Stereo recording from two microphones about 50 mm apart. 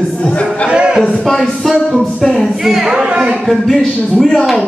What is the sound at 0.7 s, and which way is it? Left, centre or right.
Music, centre.